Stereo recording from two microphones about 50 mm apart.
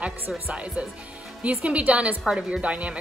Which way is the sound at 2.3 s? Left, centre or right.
Centre.